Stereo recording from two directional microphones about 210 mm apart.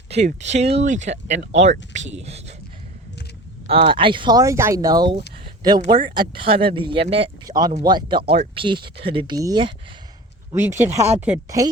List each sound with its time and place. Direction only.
0.1 s speech: 35° right (ahead or behind)
3.7 s speech: 25° right (ahead or behind)